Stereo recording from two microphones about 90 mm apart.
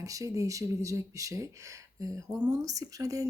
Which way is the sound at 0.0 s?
40° right (ahead or behind).